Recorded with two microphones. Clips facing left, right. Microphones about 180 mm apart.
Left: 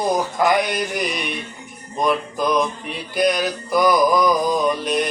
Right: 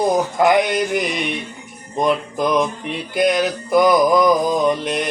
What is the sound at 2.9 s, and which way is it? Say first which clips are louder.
Male singing: right 2 dB; 20° right (ahead or behind).